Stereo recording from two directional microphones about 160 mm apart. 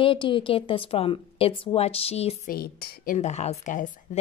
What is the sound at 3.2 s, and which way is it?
Speech, 45° left (ahead or behind).